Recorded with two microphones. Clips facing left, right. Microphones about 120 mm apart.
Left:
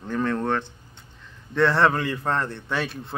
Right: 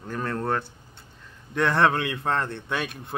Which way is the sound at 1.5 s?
15° right (ahead or behind).